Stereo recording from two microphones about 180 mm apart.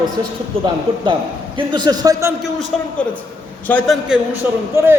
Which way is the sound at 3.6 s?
5° left (ahead or behind).